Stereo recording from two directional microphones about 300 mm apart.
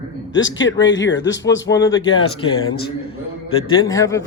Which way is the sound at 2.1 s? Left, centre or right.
Left.